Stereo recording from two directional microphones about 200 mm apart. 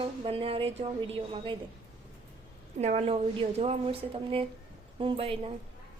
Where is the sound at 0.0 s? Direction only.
25° right (ahead or behind).